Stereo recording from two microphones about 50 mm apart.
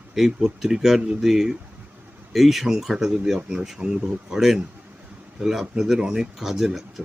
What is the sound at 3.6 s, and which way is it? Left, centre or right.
Speech, centre.